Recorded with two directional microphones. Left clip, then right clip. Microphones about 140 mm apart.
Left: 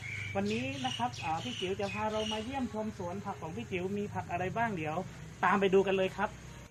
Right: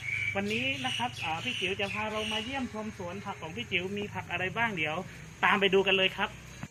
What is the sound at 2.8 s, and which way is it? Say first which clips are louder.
Speech: left 1 dB; 20° left (ahead or behind).